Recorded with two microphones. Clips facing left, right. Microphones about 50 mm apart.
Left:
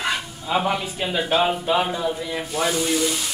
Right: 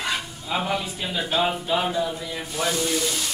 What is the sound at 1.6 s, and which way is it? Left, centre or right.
Speech, left.